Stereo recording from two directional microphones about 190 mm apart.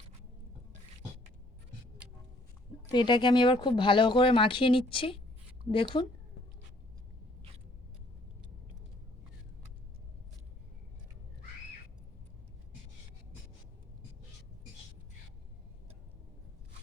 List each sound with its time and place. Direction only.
2.9 s speech: 25° left (ahead or behind)